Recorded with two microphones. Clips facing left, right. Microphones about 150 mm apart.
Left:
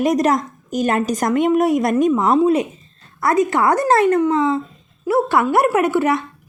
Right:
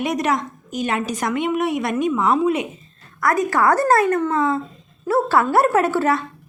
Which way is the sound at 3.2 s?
25° left (ahead or behind).